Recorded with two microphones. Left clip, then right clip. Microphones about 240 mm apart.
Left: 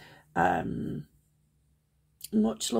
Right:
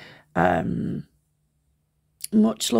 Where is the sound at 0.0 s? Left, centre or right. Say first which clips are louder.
Right 5 dB; right.